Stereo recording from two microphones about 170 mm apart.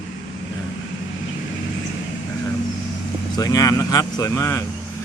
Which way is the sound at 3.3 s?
20° left (ahead or behind).